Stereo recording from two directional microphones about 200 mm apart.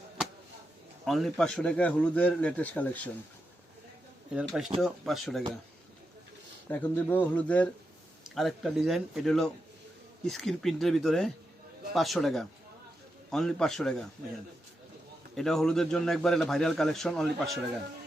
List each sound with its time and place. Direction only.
1.0 s a man's voice: centre (ahead or behind)
4.4 s a man's voice: 5° right (ahead or behind)
6.7 s a man's voice: 10° left (ahead or behind)
15.4 s a man's voice: centre (ahead or behind)